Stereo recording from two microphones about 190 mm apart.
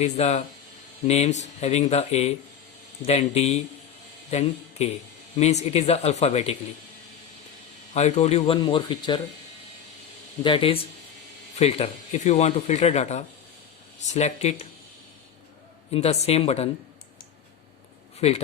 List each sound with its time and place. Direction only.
0.0 s speech: 35° left (ahead or behind)
7.9 s speech: 35° left (ahead or behind)
10.4 s speech: 30° left (ahead or behind)
15.9 s speech: 35° left (ahead or behind)
18.2 s speech: 35° left (ahead or behind)